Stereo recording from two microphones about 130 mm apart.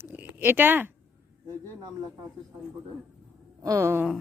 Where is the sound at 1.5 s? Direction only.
30° right (ahead or behind).